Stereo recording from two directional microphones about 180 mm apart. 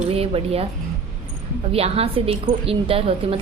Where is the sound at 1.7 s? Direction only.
35° right (ahead or behind).